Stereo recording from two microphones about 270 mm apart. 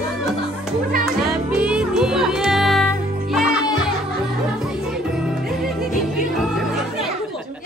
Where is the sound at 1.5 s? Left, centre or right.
Centre.